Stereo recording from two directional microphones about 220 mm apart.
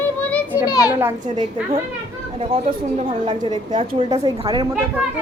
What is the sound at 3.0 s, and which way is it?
A woman's voice, 20° right (ahead or behind).